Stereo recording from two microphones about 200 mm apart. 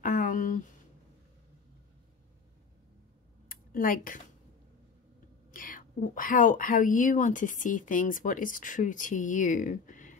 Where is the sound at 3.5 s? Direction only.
45° left (ahead or behind).